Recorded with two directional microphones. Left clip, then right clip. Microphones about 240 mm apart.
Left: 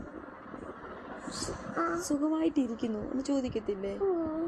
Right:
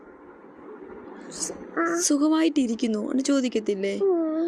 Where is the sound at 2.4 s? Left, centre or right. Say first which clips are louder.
Right 7 dB; right.